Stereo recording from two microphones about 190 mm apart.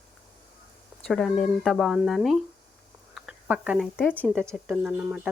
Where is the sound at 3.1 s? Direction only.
5° right (ahead or behind).